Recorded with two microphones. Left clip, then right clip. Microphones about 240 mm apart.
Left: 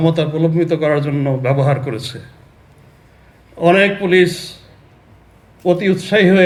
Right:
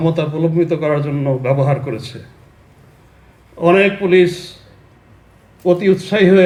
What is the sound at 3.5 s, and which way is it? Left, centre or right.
Speech, left.